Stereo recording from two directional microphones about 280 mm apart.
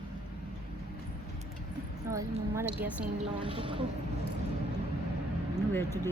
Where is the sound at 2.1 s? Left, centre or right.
Centre.